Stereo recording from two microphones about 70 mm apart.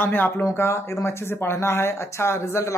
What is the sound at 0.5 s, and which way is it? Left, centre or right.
Speech, left.